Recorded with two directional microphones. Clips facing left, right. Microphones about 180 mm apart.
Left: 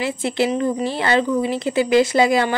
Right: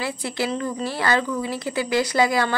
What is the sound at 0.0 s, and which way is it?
Speech, 25° left (ahead or behind).